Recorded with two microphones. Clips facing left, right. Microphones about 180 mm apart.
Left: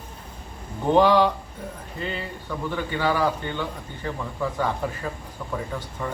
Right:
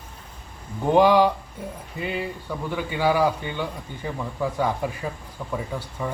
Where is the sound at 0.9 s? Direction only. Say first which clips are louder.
Right 1 dB; 10° right (ahead or behind).